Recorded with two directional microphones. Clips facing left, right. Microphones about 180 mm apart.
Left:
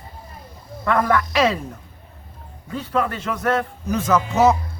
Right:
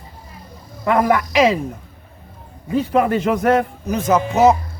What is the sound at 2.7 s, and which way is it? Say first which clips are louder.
Speech: right 7 dB; 15° right (ahead or behind).